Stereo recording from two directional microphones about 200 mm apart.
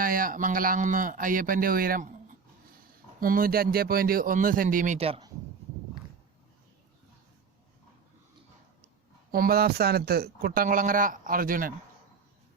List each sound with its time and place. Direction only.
0.0 s speech: 45° right (ahead or behind)
3.2 s speech: 45° right (ahead or behind); by 5.3 s 30° right (ahead or behind)
9.3 s speech: 50° right (ahead or behind)